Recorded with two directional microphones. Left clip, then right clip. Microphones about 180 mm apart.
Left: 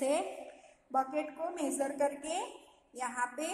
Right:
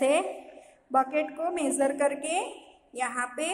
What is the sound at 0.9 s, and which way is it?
A woman's voice, 25° right (ahead or behind).